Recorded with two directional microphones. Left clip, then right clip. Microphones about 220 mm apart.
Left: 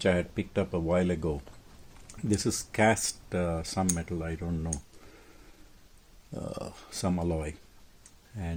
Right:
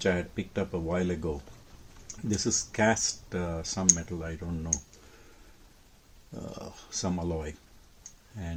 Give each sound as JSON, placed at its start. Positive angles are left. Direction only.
{"t": 0.0, "sound": "speech", "side_deg": 35}
{"t": 2.3, "sound": "speech", "side_deg": 40}
{"t": 6.3, "sound": "speech", "side_deg": 35}